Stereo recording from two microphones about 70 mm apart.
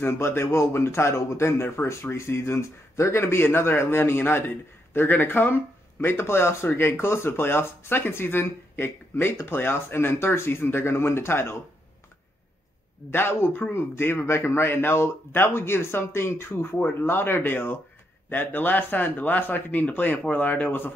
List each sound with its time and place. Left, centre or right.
0.0 s a man's voice: left
13.1 s a man's voice: left